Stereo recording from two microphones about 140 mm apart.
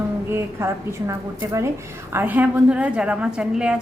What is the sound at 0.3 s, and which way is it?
A woman's voice, 20° right (ahead or behind).